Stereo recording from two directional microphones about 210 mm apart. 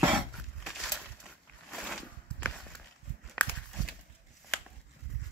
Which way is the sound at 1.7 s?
Centre (ahead or behind).